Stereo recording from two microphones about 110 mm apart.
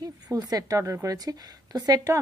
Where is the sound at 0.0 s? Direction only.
35° right (ahead or behind).